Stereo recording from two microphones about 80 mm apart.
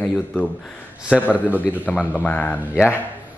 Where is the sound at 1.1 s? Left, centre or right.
Centre.